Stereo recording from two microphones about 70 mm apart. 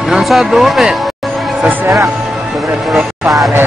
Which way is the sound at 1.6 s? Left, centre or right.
Right.